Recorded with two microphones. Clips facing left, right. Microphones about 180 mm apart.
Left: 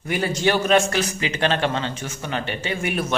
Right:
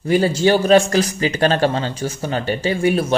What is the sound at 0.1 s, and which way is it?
A man's voice, 30° right (ahead or behind).